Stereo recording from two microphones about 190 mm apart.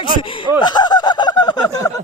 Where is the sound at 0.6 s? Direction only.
20° left (ahead or behind).